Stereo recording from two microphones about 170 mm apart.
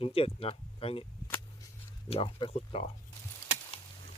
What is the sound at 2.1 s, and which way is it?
Speech, 35° left (ahead or behind).